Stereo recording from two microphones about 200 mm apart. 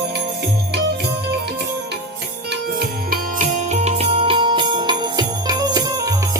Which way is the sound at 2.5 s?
50° right (ahead or behind).